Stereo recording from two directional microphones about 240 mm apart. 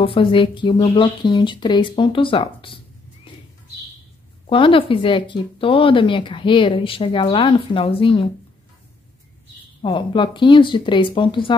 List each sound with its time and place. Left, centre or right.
0.0 s speech: left
4.5 s speech: left
9.8 s speech: left